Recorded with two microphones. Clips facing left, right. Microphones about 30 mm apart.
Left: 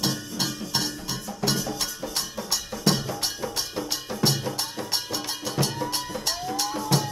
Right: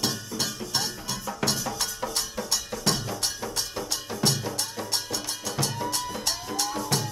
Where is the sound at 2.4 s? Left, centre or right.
Centre.